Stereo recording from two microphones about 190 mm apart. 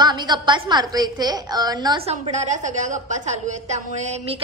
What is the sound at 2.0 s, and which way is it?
A woman's voice, 40° right (ahead or behind).